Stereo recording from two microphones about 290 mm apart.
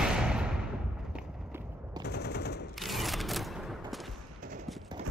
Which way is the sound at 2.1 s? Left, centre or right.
Left.